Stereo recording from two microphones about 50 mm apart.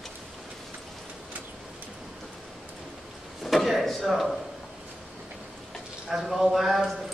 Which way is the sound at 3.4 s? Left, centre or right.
Centre.